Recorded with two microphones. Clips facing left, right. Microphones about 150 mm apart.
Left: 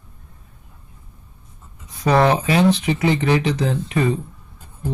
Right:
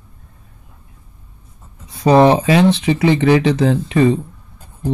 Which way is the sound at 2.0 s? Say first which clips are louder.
Right 6 dB; 25° right (ahead or behind).